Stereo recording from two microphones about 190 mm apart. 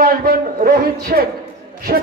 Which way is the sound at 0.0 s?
50° right (ahead or behind).